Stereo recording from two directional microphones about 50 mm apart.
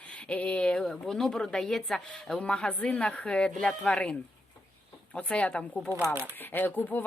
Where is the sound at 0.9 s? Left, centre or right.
Centre.